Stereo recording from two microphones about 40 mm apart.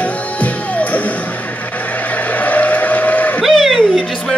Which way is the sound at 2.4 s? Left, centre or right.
Left.